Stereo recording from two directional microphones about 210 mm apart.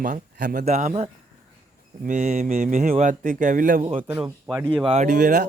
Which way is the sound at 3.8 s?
25° right (ahead or behind).